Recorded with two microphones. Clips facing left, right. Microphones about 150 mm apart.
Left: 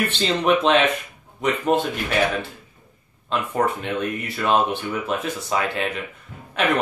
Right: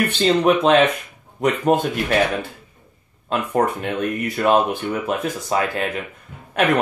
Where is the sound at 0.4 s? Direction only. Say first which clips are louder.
Right 2 dB; 40° right (ahead or behind).